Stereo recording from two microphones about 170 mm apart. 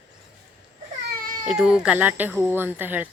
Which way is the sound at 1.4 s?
5° right (ahead or behind).